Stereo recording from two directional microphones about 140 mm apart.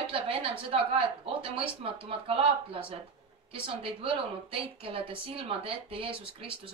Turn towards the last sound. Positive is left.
turn(degrees=-40)  # may be behind; listen again after turning